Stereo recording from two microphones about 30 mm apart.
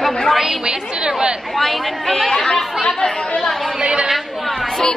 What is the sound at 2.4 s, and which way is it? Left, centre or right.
Speech, centre.